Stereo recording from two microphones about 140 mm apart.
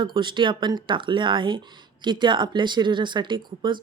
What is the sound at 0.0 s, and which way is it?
A woman's voice, 35° right (ahead or behind).